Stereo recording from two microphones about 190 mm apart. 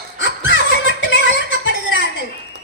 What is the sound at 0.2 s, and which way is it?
Music, 75° left (ahead or behind).